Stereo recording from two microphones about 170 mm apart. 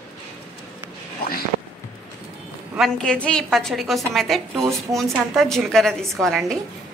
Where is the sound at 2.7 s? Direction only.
Centre (ahead or behind).